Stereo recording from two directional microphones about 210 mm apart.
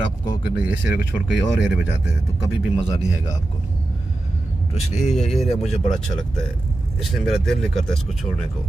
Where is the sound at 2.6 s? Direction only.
5° right (ahead or behind).